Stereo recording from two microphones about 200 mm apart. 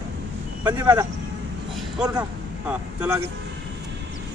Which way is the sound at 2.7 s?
10° right (ahead or behind).